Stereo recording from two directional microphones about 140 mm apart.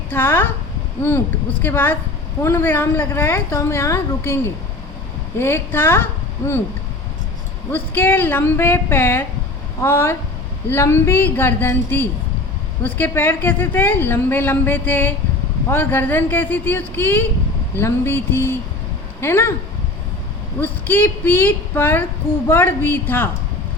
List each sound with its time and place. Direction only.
0.1 s a woman's voice: 15° left (ahead or behind)
1.6 s a woman's voice: 15° left (ahead or behind)
7.7 s a woman's voice: 15° left (ahead or behind)
20.6 s a woman's voice: 15° left (ahead or behind)